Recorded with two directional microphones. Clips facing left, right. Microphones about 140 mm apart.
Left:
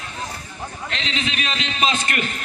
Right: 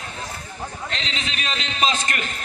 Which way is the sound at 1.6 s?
5° left (ahead or behind).